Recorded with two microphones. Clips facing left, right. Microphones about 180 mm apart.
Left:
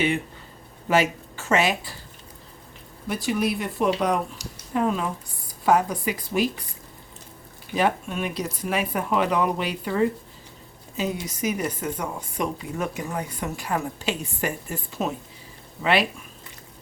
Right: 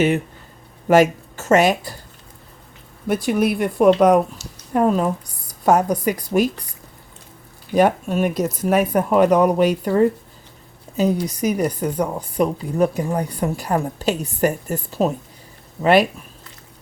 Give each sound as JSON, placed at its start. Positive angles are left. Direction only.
{"t": 0.9, "sound": "speech", "side_deg": -45}
{"t": 3.1, "sound": "speech", "side_deg": -55}
{"t": 7.8, "sound": "a woman's voice", "side_deg": -45}